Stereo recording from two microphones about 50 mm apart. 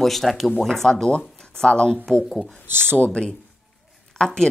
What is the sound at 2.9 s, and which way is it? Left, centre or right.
Speech, left.